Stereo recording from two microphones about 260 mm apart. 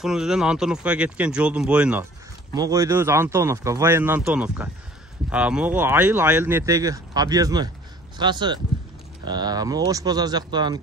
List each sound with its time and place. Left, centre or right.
0.0 s speech: centre